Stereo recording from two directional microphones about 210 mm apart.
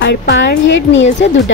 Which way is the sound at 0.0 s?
55° left (ahead or behind).